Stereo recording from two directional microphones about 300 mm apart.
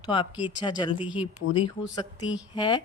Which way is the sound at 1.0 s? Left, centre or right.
Centre.